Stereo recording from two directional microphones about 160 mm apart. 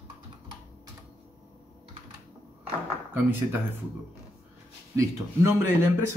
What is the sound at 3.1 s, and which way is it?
Mantra, 15° right (ahead or behind).